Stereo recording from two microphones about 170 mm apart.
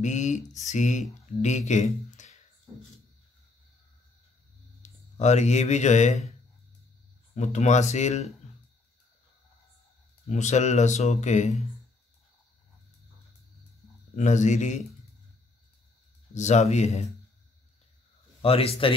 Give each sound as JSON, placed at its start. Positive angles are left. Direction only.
{"t": 0.0, "sound": "speech", "side_deg": 45}
{"t": 4.8, "sound": "speech", "side_deg": 40}
{"t": 7.3, "sound": "speech", "side_deg": 45}
{"t": 10.2, "sound": "speech", "side_deg": 40}
{"t": 14.1, "sound": "speech", "side_deg": 45}
{"t": 16.3, "sound": "speech", "side_deg": 40}
{"t": 18.4, "sound": "speech", "side_deg": 35}